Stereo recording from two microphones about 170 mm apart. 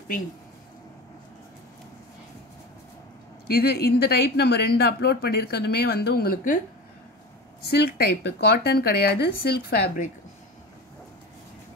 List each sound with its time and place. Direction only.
3.5 s speech: 65° left (ahead or behind)
7.7 s speech: 70° left (ahead or behind)